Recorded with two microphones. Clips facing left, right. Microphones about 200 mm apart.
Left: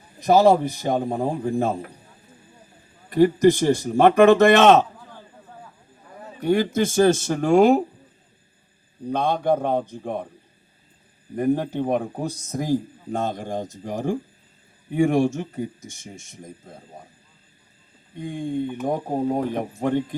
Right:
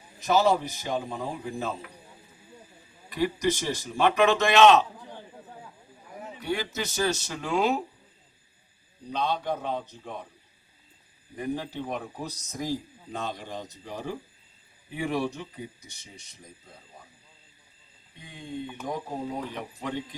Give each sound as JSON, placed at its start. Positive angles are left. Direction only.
{"t": 0.3, "sound": "a man's voice", "side_deg": 55}
{"t": 3.1, "sound": "a man's voice", "side_deg": 50}
{"t": 4.9, "sound": "a sound", "side_deg": -20}
{"t": 6.4, "sound": "a man's voice", "side_deg": 50}
{"t": 9.0, "sound": "a man's voice", "side_deg": 50}
{"t": 11.3, "sound": "a man's voice", "side_deg": 55}
{"t": 18.2, "sound": "a man's voice", "side_deg": 50}